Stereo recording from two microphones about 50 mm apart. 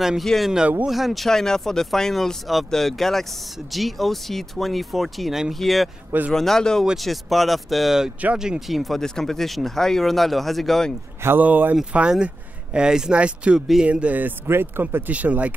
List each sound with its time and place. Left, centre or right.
0.2 s speech: centre
7.0 s speech: centre
9.0 s speech: centre
11.3 s speech: right
11.9 s speech: right
13.6 s speech: centre
13.8 s speech: right
14.4 s speech: right
15.0 s speech: right